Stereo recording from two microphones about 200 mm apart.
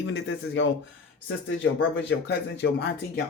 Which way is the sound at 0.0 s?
60° left (ahead or behind).